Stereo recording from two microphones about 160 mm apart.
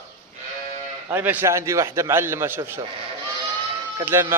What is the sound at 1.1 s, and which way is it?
A man's voice, 15° right (ahead or behind).